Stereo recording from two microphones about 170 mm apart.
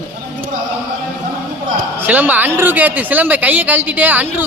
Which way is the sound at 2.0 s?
10° right (ahead or behind).